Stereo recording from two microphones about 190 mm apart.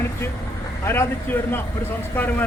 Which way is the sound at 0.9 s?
10° left (ahead or behind).